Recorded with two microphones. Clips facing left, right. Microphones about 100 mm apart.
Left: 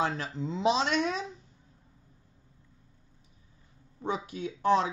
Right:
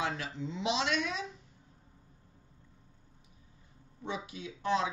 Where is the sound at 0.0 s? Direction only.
40° left (ahead or behind).